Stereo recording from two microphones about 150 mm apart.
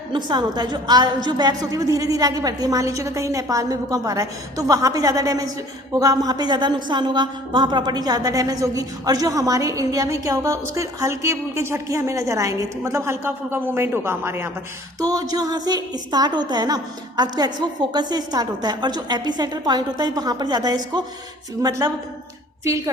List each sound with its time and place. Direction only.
0.1 s a woman's voice: 30° right (ahead or behind)